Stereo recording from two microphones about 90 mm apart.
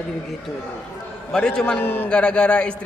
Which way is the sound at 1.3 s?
10° left (ahead or behind).